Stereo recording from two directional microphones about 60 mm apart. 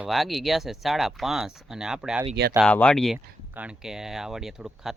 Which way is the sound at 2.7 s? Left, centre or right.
Centre.